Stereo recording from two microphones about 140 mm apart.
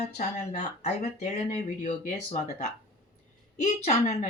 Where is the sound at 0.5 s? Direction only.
55° left (ahead or behind).